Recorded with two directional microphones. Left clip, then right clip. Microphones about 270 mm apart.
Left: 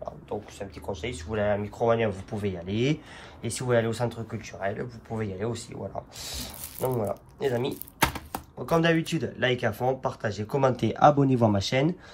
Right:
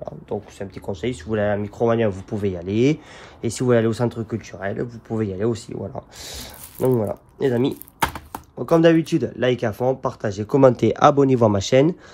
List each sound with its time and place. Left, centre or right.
0.0 s speech: right